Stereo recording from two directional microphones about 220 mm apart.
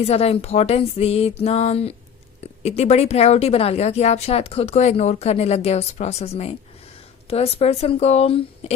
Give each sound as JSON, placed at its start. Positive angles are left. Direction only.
{"t": 0.0, "sound": "speech", "side_deg": 30}